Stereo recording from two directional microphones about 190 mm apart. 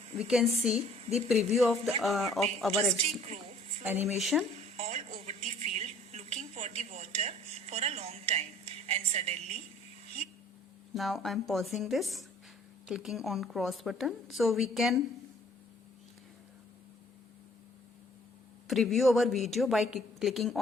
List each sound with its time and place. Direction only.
0.2 s a woman's voice: centre (ahead or behind)
3.2 s a sound: 30° right (ahead or behind)
3.8 s a woman's voice: 5° right (ahead or behind)
4.8 s a sound: 35° right (ahead or behind)
10.9 s a woman's voice: centre (ahead or behind)
18.7 s a woman's voice: centre (ahead or behind)